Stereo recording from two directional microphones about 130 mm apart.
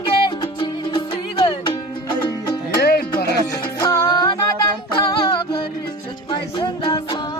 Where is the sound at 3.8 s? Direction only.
30° left (ahead or behind).